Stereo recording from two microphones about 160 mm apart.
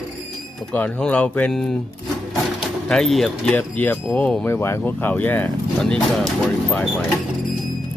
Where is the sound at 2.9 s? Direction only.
5° left (ahead or behind).